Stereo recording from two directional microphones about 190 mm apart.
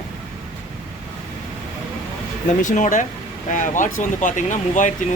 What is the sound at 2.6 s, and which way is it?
Speech, 40° left (ahead or behind).